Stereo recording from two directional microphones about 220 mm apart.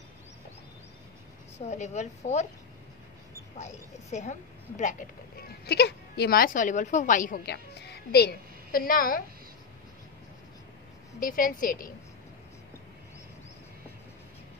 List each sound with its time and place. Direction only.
1.7 s a woman's voice: 30° left (ahead or behind)
3.5 s a woman's voice: 30° left (ahead or behind)
11.1 s a woman's voice: 40° left (ahead or behind)